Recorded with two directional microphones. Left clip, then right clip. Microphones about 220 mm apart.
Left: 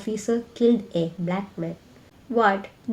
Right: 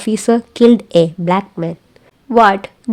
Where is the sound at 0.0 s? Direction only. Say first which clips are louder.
Right 11 dB; 50° right (ahead or behind).